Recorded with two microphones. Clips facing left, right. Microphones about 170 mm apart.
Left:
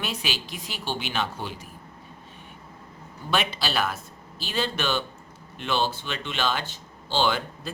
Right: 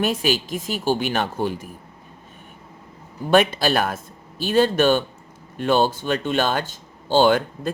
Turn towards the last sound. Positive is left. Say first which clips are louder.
# right 8 dB
turn(degrees=-50)  # may be behind; listen again after turning